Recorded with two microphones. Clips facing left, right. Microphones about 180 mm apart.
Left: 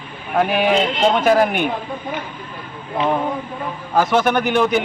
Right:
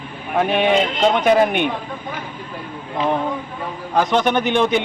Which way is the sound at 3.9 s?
5° left (ahead or behind).